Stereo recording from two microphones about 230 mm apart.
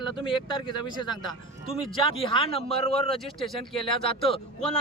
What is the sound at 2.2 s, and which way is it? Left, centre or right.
Speech, left.